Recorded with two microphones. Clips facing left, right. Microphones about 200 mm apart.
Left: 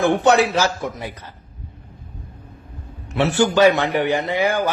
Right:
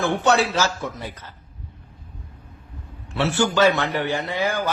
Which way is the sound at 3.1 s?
15° left (ahead or behind).